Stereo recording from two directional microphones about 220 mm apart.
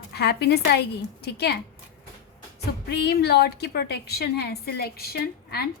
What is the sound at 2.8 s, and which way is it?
A woman's voice, 45° left (ahead or behind).